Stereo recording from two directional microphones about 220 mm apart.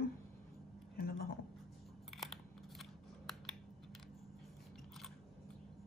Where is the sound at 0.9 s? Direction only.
45° left (ahead or behind).